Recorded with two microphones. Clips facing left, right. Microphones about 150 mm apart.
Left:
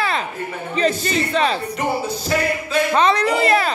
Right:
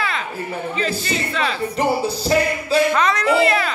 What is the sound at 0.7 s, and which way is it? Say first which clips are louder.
Music: left 7 dB; 35° left (ahead or behind).